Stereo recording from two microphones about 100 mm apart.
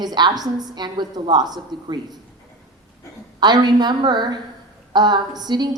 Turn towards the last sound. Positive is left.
turn(degrees=-45)  # may be behind; listen again after turning